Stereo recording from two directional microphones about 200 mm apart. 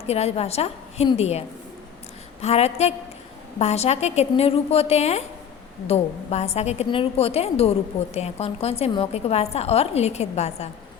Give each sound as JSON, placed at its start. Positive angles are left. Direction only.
{"t": 0.1, "sound": "a woman's voice", "side_deg": 30}